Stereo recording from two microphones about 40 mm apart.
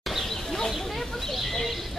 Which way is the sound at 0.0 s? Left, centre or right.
Centre.